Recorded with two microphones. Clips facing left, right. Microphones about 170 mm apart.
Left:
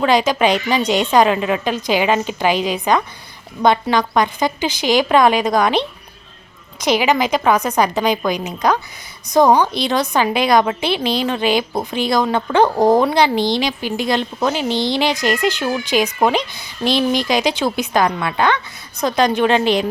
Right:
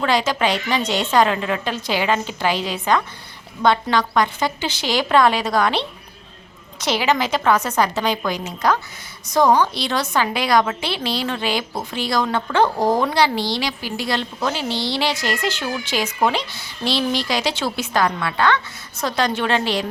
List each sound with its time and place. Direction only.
0.0 s a woman's voice: 15° left (ahead or behind)